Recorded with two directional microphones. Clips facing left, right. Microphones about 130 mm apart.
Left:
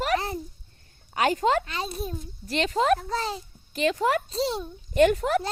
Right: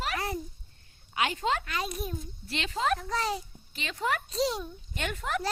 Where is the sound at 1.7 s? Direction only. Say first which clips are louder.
Left 2 dB; 30° left (ahead or behind).